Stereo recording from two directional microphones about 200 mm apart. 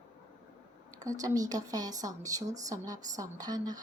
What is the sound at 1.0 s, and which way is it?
Speech, 15° right (ahead or behind).